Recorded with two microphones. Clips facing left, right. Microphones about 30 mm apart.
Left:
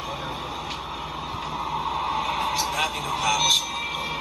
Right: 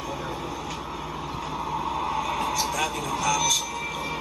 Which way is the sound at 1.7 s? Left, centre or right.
Left.